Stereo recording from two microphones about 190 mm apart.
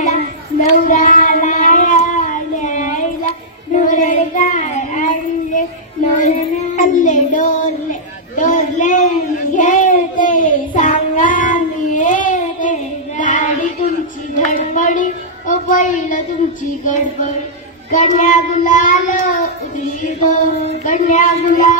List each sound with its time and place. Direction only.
0.7 s a sound: 40° left (ahead or behind)
3.7 s child singing: 45° left (ahead or behind)
16.6 s speech: 40° left (ahead or behind)